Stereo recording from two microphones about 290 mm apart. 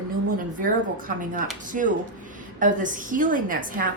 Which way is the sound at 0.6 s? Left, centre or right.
Right.